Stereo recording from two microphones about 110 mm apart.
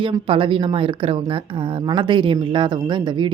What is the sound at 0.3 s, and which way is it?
Speech, 50° right (ahead or behind).